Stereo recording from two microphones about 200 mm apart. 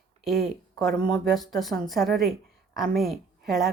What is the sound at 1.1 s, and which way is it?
Speech, centre (ahead or behind).